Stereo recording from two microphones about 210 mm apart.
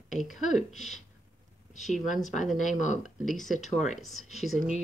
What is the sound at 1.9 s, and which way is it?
Speech, 35° left (ahead or behind).